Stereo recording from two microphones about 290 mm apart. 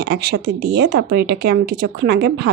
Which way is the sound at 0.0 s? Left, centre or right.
Right.